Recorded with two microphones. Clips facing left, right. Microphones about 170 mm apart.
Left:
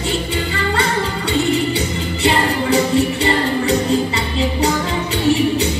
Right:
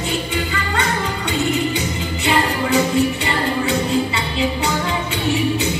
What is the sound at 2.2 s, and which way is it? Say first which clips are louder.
Music: left 2 dB; 35° left (ahead or behind).